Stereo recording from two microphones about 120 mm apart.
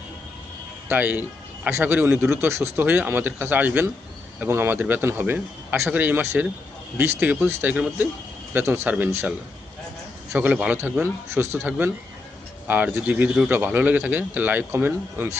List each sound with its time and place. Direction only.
0.9 s speech: 15° right (ahead or behind)
10.3 s speech: 10° right (ahead or behind)